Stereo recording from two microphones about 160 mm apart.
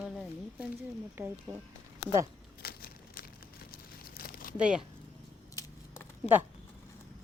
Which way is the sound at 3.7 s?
65° left (ahead or behind).